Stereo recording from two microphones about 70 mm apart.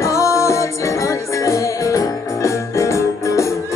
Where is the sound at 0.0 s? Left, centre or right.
Left.